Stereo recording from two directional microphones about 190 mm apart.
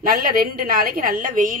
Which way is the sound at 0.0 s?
50° right (ahead or behind).